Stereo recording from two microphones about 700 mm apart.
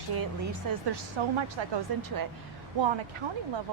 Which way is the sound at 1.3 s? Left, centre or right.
Right.